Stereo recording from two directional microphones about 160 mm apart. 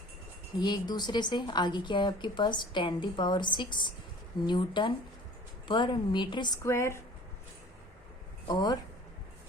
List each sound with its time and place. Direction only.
0.6 s a woman's voice: 25° left (ahead or behind)
8.4 s a woman's voice: 25° left (ahead or behind)